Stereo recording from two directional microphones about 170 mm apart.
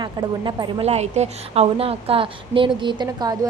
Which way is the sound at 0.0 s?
25° right (ahead or behind).